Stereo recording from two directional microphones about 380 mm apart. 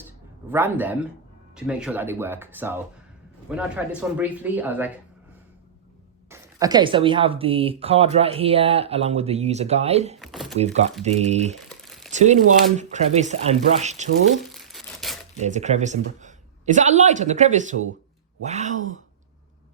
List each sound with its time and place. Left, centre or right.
0.5 s speech: centre
6.3 s speech: centre
10.2 s a sound: centre
10.6 s speech: centre
14.5 s crumpling: centre
15.4 s a woman's voice: centre